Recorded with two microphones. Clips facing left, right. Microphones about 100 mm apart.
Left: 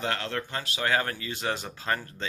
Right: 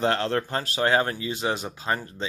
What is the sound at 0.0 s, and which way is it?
Speech, 35° right (ahead or behind).